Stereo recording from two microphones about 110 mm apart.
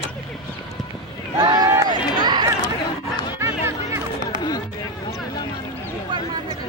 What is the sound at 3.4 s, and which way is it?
Chatter, 25° right (ahead or behind).